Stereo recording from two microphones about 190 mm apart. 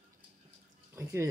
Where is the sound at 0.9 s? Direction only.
15° right (ahead or behind).